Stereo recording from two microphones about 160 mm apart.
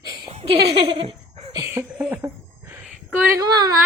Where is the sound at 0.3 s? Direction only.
40° right (ahead or behind).